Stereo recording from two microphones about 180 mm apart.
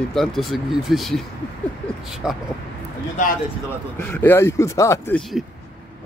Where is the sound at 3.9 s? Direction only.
10° left (ahead or behind).